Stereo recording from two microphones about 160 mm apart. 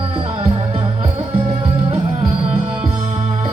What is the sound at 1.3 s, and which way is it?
Music, 35° right (ahead or behind).